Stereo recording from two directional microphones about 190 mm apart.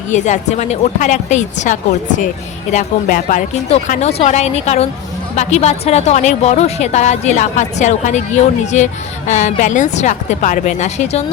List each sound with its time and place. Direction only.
0.1 s speech: 40° left (ahead or behind)